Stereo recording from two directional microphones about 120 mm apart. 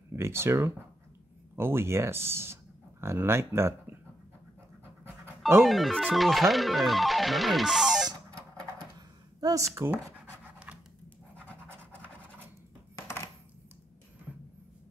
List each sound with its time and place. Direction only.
0.1 s speech: 20° right (ahead or behind)
5.6 s speech: centre (ahead or behind)
9.4 s speech: 30° right (ahead or behind)
11.3 s scratch: 10° left (ahead or behind)